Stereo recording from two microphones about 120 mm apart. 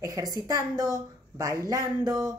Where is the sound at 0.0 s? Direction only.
30° right (ahead or behind).